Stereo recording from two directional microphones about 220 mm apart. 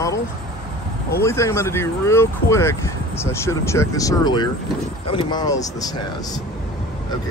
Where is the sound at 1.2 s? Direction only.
15° left (ahead or behind).